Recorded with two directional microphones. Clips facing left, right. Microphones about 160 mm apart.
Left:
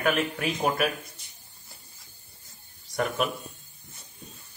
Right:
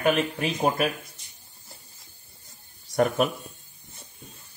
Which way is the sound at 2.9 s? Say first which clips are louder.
Right 5 dB; 40° right (ahead or behind).